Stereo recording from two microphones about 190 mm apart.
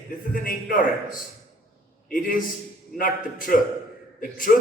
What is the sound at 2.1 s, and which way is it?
A man's voice, 45° left (ahead or behind).